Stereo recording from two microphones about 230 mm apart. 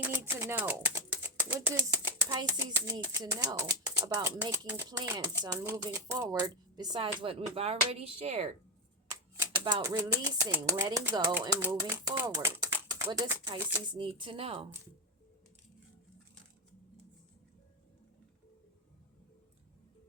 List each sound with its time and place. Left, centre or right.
0.0 s speech: centre; by 8.4 s right
9.4 s speech: centre